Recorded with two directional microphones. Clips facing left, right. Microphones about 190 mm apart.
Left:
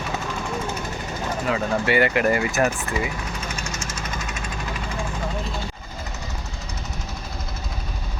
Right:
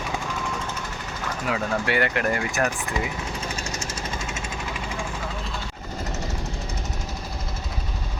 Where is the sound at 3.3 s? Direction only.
35° right (ahead or behind).